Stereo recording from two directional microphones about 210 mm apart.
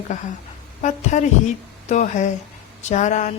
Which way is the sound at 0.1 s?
35° left (ahead or behind).